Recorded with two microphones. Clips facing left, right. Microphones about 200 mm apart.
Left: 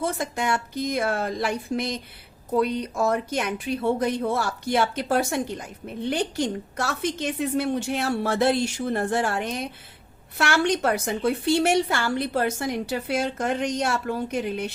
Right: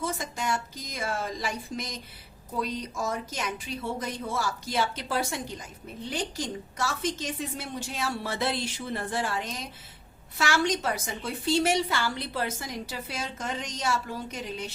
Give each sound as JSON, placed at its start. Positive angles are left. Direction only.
{"t": 0.0, "sound": "a woman's voice", "side_deg": 60}
{"t": 9.2, "sound": "a woman's voice", "side_deg": 60}